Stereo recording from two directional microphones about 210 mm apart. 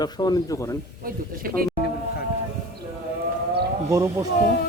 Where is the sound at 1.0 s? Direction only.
45° right (ahead or behind).